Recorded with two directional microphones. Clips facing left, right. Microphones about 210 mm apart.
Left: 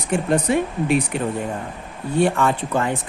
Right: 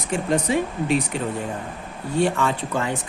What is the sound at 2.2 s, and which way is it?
Speech, 55° left (ahead or behind).